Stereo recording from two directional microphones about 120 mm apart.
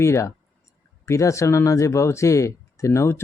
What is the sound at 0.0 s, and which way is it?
Speech, 25° left (ahead or behind).